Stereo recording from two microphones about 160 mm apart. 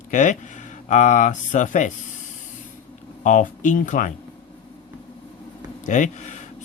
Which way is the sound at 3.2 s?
50° left (ahead or behind).